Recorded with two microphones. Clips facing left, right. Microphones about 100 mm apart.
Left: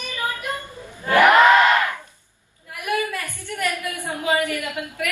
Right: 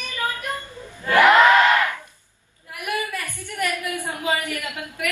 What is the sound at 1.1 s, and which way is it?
Crowd, 15° left (ahead or behind).